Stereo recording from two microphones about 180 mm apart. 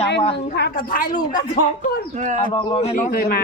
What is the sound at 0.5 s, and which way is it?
Speech, 60° left (ahead or behind).